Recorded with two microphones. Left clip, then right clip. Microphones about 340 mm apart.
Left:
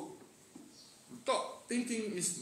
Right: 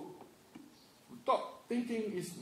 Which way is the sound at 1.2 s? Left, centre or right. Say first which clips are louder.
Right 1 dB; right.